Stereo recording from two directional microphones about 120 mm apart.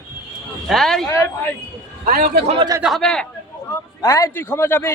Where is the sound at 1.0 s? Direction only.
25° left (ahead or behind).